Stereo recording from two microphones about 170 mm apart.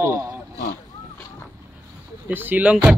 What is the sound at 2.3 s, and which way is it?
Speech, 10° right (ahead or behind).